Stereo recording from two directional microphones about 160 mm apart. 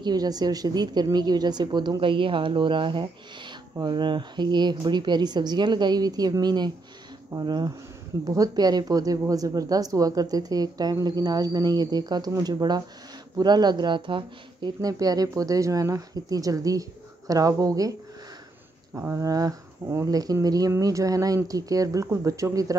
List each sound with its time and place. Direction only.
0.0 s speech: 25° right (ahead or behind)
18.9 s speech: 15° right (ahead or behind)